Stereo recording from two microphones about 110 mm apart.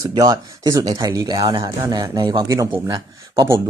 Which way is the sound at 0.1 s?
35° right (ahead or behind).